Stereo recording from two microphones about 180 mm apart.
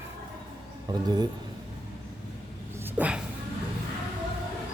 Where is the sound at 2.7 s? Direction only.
10° right (ahead or behind).